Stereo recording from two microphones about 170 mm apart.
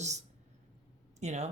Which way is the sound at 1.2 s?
40° right (ahead or behind).